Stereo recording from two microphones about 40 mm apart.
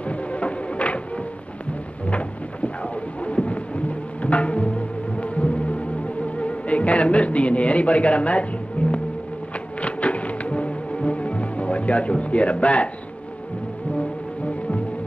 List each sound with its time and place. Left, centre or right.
0.1 s music: left
2.0 s thunder: left
6.2 s speech: left
8.8 s music: left